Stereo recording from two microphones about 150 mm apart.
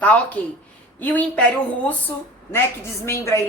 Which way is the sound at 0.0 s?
10° left (ahead or behind).